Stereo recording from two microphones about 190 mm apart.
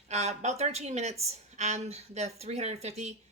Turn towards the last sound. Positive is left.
turn(degrees=-35)  # may be behind; listen again after turning